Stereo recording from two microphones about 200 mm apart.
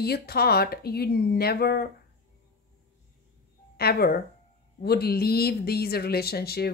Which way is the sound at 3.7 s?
50° left (ahead or behind).